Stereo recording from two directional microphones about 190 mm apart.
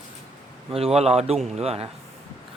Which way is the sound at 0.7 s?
30° right (ahead or behind).